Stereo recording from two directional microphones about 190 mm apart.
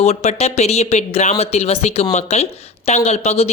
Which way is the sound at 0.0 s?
35° left (ahead or behind).